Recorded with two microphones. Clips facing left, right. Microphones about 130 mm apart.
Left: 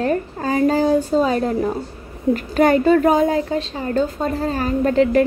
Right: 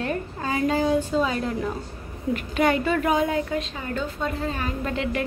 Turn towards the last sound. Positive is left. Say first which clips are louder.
# left 12 dB
turn(degrees=40)  # may be behind; listen again after turning